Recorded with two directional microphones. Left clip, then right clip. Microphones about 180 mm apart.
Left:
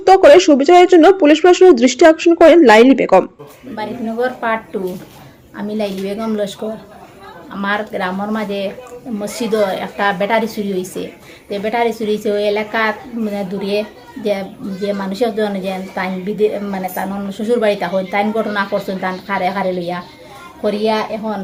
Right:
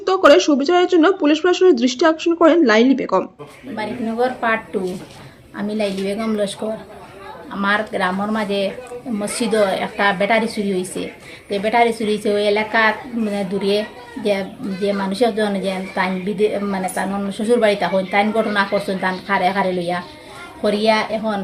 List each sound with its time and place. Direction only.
0.0 s speech: 20° left (ahead or behind)
3.8 s a woman's voice: centre (ahead or behind)
14.8 s a woman's voice: centre (ahead or behind)